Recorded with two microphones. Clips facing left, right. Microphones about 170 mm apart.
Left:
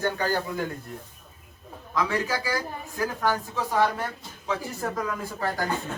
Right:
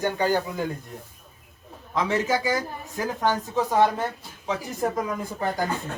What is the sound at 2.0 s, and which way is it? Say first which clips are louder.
Speech: right 3 dB; 20° right (ahead or behind).